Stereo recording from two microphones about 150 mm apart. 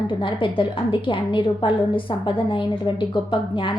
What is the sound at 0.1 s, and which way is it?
A woman's voice, 35° left (ahead or behind).